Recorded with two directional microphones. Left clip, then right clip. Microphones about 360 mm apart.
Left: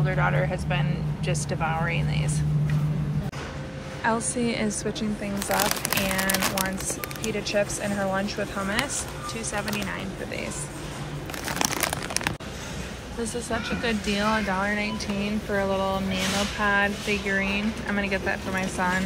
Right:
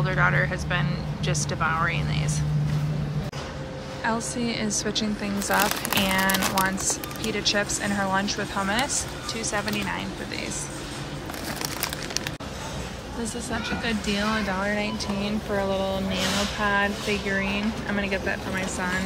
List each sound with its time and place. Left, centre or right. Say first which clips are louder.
0.0 s speech: right 3 dB; centre
4.0 s speech: left 2 dB; centre
11.8 s crumpling: left 3 dB; centre
13.2 s speech: left 2 dB; centre